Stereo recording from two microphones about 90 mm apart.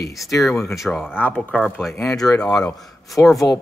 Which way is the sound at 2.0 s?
5° left (ahead or behind).